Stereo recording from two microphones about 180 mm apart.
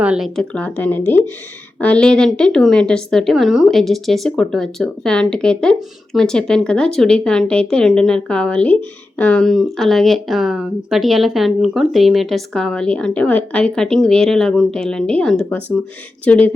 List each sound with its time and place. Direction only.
0.0 s speech: 5° right (ahead or behind)